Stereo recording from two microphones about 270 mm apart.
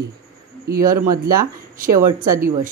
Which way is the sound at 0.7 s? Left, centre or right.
Right.